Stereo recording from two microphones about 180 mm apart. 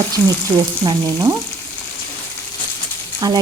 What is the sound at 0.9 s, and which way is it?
Speech, 20° right (ahead or behind).